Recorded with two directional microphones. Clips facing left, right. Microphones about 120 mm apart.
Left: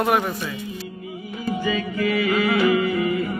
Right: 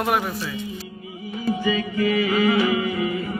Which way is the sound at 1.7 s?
40° left (ahead or behind).